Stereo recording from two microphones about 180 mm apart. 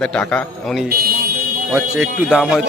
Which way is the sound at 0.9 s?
55° right (ahead or behind).